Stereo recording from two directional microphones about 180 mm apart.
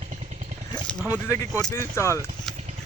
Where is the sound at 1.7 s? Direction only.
15° left (ahead or behind).